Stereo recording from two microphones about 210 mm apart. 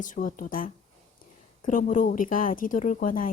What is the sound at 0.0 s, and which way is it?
Speech, 40° left (ahead or behind).